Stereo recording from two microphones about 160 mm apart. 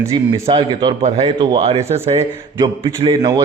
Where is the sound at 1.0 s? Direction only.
40° right (ahead or behind).